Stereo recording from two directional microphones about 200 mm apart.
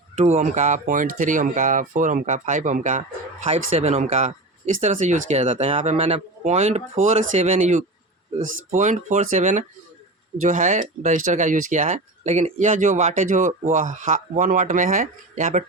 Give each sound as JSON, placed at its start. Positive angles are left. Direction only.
{"t": 0.2, "sound": "speech", "side_deg": -35}
{"t": 8.4, "sound": "speech", "side_deg": -80}
{"t": 8.7, "sound": "speech", "side_deg": -35}